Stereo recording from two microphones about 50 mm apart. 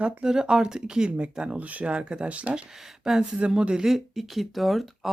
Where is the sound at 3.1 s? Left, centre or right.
Centre.